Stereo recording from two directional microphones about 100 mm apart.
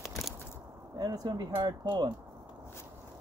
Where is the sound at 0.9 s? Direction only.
40° right (ahead or behind).